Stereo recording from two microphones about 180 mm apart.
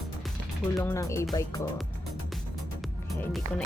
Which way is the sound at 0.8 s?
15° left (ahead or behind).